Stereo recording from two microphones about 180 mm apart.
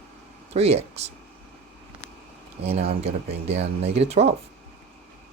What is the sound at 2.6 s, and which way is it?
Speech, 35° right (ahead or behind).